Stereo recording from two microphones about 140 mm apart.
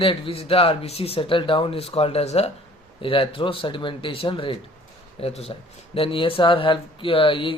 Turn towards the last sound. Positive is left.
turn(degrees=40)  # may be behind; listen again after turning